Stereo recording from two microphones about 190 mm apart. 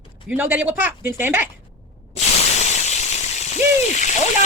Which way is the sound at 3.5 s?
40° left (ahead or behind).